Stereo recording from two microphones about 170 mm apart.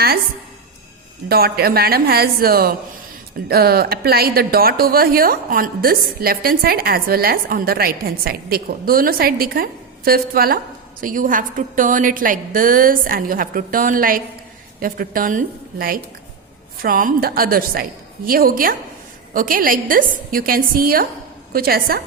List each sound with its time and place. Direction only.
1.3 s a woman's voice: 65° right (ahead or behind)